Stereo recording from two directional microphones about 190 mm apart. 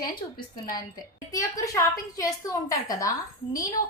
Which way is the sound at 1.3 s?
20° left (ahead or behind).